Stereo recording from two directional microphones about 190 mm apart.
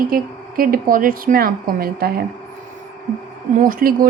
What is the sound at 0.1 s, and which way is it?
Speech, 50° right (ahead or behind).